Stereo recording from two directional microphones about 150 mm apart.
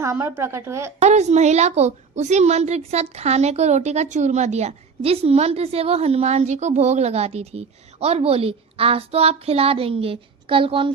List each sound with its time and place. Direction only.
0.0 s speech: 15° right (ahead or behind)
0.9 s a woman's voice: 50° right (ahead or behind)